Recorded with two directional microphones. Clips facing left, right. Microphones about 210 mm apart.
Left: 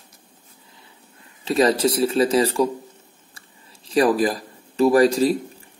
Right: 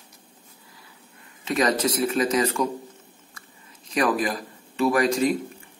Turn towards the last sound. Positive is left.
turn(degrees=35)  # may be behind; listen again after turning